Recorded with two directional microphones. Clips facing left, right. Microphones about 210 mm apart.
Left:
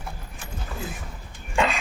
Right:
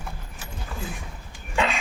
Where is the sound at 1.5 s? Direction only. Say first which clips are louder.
Left 1 dB; centre (ahead or behind).